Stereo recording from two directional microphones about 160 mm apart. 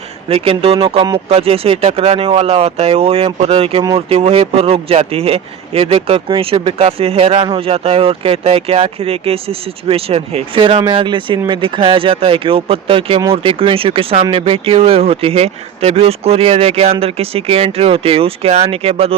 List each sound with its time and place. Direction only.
0.3 s speech: 35° right (ahead or behind)